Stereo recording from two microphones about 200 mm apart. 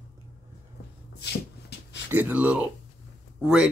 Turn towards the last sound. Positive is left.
turn(degrees=-5)  # may be behind; listen again after turning